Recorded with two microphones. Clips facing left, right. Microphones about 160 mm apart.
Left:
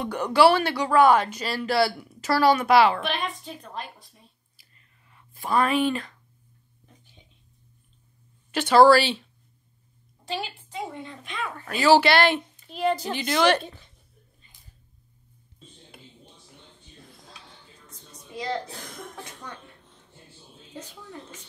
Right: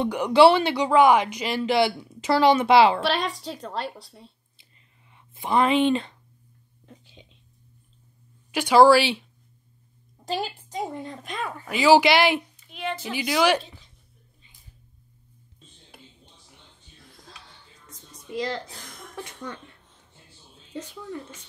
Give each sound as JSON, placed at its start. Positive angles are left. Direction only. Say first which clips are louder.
{"t": 0.1, "sound": "speech", "louder": "right 2 dB", "side_deg": -15}
{"t": 3.0, "sound": "a woman's voice", "louder": "right 4 dB", "side_deg": -90}
{"t": 5.1, "sound": "speech", "louder": "right 1 dB", "side_deg": -20}
{"t": 8.5, "sound": "speech", "louder": "even", "side_deg": -10}
{"t": 10.2, "sound": "a woman's voice", "louder": "right 3 dB", "side_deg": -40}
{"t": 11.5, "sound": "speech", "louder": "right 1 dB", "side_deg": -15}
{"t": 12.6, "sound": "a woman's voice", "louder": "left 6 dB", "side_deg": 35}
{"t": 13.1, "sound": "speech", "louder": "right 3 dB", "side_deg": -5}